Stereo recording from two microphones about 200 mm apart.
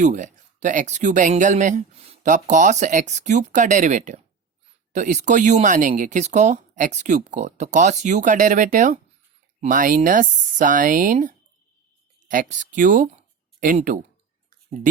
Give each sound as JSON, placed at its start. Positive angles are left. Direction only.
{"t": 0.0, "sound": "speech", "side_deg": -40}